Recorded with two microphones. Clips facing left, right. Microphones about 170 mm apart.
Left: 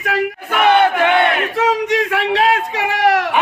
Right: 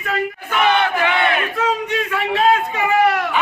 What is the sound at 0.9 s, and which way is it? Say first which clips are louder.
Speech: left 4 dB; 60° left (ahead or behind).